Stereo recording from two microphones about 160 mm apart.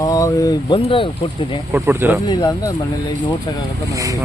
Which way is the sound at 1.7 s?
15° right (ahead or behind).